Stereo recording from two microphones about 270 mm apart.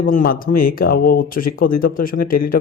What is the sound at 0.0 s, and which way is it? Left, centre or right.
Speech, left.